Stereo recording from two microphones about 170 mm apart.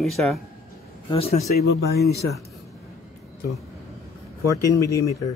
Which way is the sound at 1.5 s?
70° left (ahead or behind).